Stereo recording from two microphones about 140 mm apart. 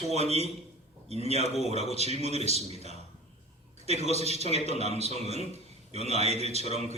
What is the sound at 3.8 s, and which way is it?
Speech, 50° right (ahead or behind).